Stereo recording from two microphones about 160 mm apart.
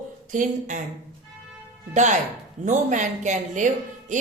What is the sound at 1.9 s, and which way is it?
Speech, 50° right (ahead or behind).